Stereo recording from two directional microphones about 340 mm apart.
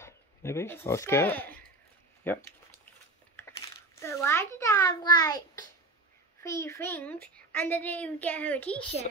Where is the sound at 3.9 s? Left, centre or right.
Centre.